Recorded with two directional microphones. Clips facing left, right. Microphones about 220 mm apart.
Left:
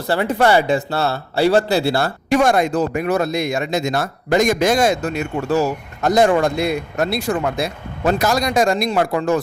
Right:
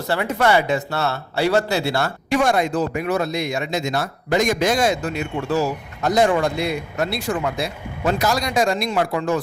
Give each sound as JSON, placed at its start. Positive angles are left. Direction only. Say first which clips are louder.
{"t": 0.1, "sound": "speech", "louder": "left 3 dB", "side_deg": 35}